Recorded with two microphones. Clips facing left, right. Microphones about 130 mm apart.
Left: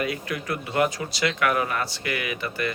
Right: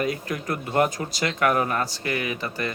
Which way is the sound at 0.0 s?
40° right (ahead or behind).